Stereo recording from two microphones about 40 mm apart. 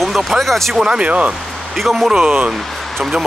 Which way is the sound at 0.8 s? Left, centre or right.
Right.